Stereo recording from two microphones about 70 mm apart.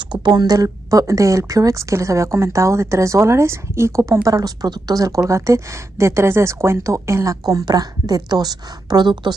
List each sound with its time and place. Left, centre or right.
0.1 s speech: right
7.4 s a woman's voice: right